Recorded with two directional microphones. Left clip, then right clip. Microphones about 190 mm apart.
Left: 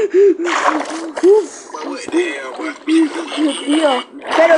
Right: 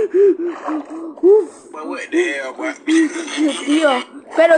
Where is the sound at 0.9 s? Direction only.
25° left (ahead or behind).